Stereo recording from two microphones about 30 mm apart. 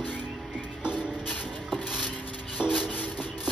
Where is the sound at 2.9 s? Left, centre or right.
Left.